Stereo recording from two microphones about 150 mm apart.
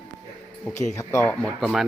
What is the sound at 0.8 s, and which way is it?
Speech, 20° left (ahead or behind).